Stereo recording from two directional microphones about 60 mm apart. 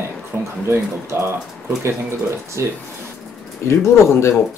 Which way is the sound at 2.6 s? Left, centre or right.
Right.